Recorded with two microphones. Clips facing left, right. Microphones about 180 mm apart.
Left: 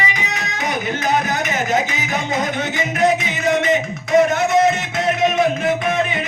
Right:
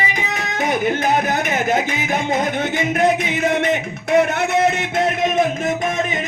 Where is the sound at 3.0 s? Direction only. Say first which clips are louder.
Left 1 dB; 55° right (ahead or behind).